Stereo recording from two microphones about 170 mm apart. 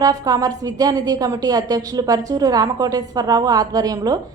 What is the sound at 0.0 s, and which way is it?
A woman's voice, 20° right (ahead or behind).